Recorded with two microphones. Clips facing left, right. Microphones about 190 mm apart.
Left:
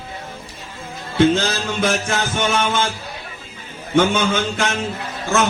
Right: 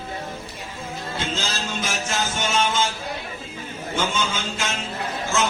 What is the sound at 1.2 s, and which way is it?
Speech, 60° left (ahead or behind).